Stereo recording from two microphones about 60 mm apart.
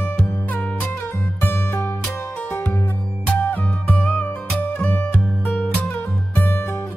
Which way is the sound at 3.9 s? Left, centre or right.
Left.